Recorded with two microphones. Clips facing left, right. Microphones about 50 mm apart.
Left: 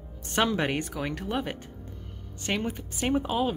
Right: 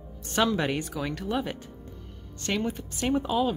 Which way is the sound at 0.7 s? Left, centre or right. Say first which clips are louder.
Even; centre.